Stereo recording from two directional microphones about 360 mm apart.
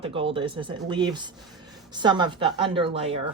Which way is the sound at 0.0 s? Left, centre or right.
Centre.